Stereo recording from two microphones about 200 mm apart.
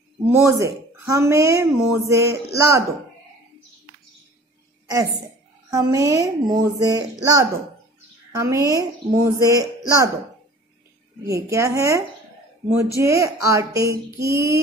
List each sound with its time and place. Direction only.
0.3 s a woman's voice: 15° right (ahead or behind)
5.7 s a woman's voice: 15° right (ahead or behind)
11.2 s a woman's voice: 15° right (ahead or behind)